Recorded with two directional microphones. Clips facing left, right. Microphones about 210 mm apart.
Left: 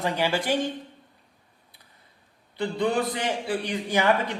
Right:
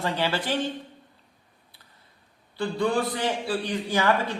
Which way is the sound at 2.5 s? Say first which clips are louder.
Even; 20° left (ahead or behind).